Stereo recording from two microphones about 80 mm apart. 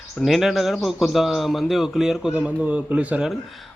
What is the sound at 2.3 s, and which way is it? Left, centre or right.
Speech, centre.